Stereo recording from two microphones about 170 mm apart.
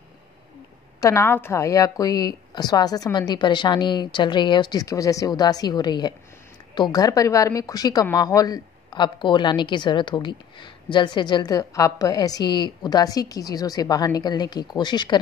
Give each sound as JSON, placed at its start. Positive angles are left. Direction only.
{"t": 1.0, "sound": "speech", "side_deg": 15}